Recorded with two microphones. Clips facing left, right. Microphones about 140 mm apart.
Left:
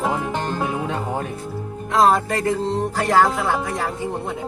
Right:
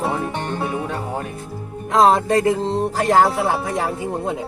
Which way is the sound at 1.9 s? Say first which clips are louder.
Right 3 dB; 30° right (ahead or behind).